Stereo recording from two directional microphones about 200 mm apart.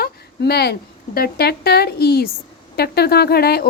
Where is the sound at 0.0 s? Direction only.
55° left (ahead or behind).